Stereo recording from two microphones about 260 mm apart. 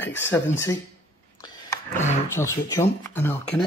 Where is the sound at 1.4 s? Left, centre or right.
Centre.